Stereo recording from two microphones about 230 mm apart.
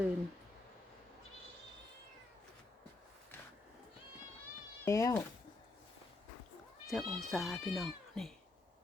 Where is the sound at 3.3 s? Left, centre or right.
Centre.